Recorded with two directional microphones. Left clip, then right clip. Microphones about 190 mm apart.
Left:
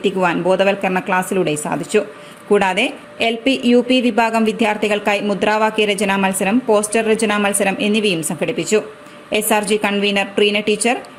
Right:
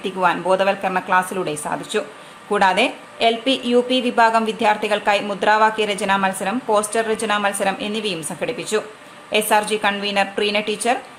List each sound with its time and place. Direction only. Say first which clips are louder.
0.0 s speech: left 2 dB; 20° left (ahead or behind)